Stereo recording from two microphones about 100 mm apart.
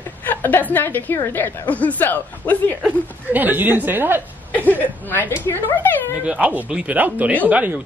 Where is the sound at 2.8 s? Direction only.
15° right (ahead or behind).